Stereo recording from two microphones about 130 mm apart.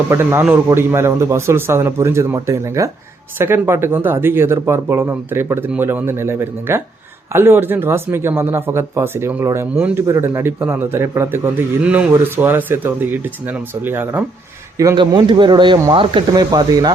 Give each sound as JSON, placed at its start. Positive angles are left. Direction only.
{"t": 0.1, "sound": "speech", "side_deg": -20}
{"t": 14.9, "sound": "speech", "side_deg": -40}